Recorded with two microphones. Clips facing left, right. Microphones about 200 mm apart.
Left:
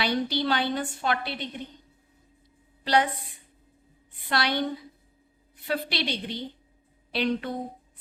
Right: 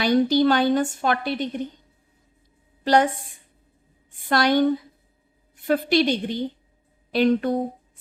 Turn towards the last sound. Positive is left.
turn(degrees=-45)  # may be behind; listen again after turning